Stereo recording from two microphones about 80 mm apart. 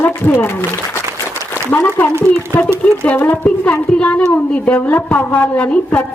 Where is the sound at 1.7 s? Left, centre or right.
Left.